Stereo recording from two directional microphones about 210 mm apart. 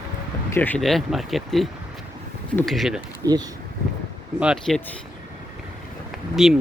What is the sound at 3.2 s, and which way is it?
Speech, 15° right (ahead or behind).